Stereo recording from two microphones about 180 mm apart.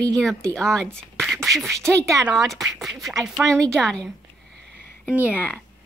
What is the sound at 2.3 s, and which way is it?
Speech, centre (ahead or behind).